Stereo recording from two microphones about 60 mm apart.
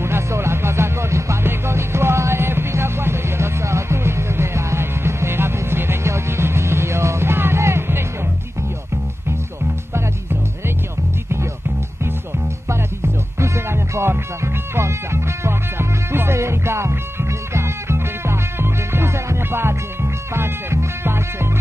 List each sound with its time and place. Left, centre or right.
0.0 s music: right
12.6 s music: right